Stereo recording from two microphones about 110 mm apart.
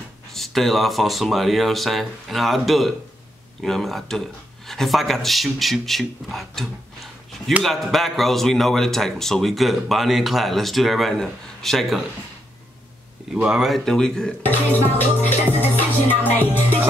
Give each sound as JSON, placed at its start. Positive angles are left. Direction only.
{"t": 0.3, "sound": "a man's voice", "side_deg": 0}
{"t": 13.3, "sound": "a man's voice", "side_deg": -5}
{"t": 14.4, "sound": "music", "side_deg": 15}